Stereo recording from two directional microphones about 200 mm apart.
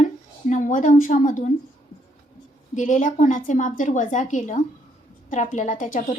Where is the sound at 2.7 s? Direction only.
40° left (ahead or behind).